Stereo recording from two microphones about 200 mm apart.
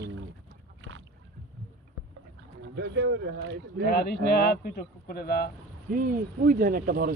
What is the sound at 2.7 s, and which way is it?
Speech, 60° right (ahead or behind).